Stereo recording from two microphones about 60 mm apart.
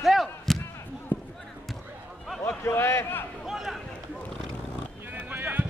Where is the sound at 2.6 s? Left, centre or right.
Left.